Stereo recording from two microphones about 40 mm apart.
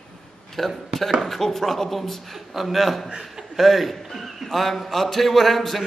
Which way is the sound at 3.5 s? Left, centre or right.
Centre.